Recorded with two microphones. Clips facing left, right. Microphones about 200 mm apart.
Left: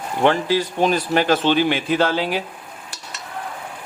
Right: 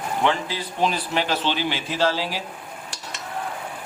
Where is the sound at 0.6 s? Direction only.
45° left (ahead or behind).